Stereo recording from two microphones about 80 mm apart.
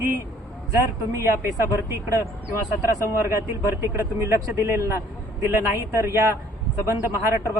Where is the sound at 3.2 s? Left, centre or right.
Right.